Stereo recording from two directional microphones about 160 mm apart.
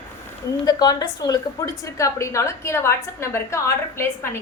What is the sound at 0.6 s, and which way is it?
A woman's voice, 25° left (ahead or behind).